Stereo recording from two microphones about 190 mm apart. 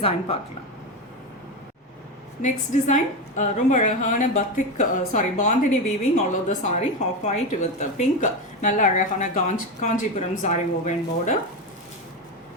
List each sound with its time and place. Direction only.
0.0 s a woman's voice: 30° left (ahead or behind)
2.4 s a woman's voice: 40° left (ahead or behind)